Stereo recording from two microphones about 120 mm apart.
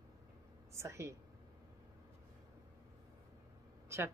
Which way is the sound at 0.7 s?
25° right (ahead or behind).